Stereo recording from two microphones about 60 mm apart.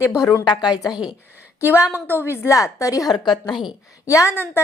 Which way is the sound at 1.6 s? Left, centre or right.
Left.